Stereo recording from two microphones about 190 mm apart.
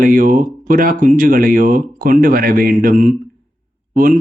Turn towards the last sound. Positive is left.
turn(degrees=-45)  # may be behind; listen again after turning